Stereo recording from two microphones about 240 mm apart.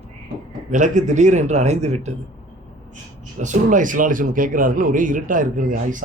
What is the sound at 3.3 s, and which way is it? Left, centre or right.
Speech, right.